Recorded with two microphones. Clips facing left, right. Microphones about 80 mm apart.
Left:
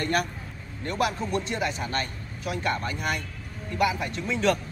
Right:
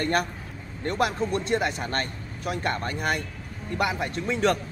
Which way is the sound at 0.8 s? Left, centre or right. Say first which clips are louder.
Right 2 dB; right.